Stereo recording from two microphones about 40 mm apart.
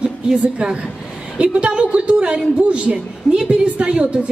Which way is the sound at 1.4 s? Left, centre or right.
Right.